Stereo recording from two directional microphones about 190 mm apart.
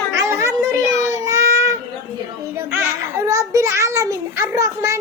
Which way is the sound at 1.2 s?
15° right (ahead or behind).